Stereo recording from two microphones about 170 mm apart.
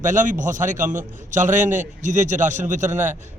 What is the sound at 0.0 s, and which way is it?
A man's voice, 50° right (ahead or behind).